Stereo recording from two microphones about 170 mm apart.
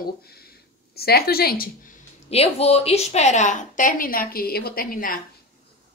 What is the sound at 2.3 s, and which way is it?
A woman's voice, 35° left (ahead or behind).